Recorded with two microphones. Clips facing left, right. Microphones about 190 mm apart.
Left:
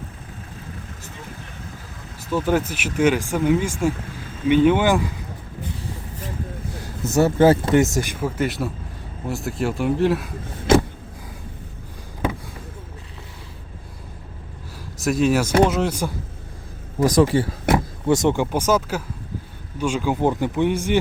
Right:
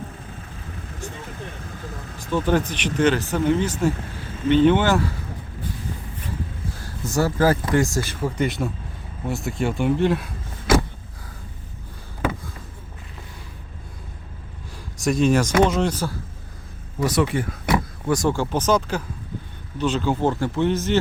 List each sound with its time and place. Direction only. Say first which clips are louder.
2.3 s speech: even; 10° left (ahead or behind)
7.0 s speech: left 4 dB; 20° left (ahead or behind); by 10.2 s centre (ahead or behind)
14.9 s speech: even; 5° left (ahead or behind)
17.1 s speech: left 5 dB; 35° left (ahead or behind)
18.1 s speech: left 3 dB; 20° left (ahead or behind)
18.5 s speech: even; 10° left (ahead or behind)